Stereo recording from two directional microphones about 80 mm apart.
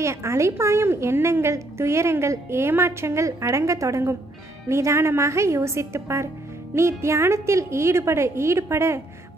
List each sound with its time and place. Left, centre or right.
0.0 s a woman's voice: right